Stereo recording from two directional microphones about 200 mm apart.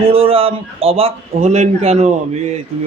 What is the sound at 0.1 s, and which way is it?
A man's voice, 30° right (ahead or behind).